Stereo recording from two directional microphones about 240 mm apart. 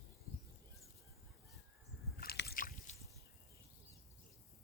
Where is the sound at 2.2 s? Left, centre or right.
Left.